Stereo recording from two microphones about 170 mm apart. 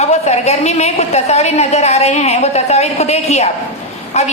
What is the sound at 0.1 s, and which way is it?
A woman's voice, 40° left (ahead or behind).